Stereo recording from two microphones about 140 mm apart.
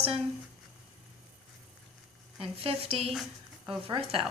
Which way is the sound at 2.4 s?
40° right (ahead or behind).